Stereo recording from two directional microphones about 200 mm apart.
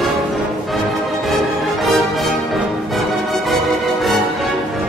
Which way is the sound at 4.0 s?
Centre (ahead or behind).